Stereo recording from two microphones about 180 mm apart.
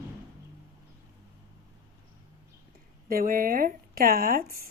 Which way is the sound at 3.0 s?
50° right (ahead or behind).